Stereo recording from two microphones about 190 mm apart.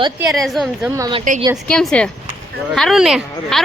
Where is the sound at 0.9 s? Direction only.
20° right (ahead or behind).